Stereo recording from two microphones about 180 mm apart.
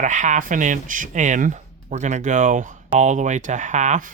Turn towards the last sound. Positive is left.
turn(degrees=-45)  # may be behind; listen again after turning